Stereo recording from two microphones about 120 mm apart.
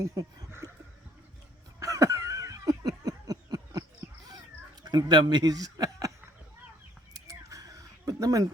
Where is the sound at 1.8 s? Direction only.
25° right (ahead or behind).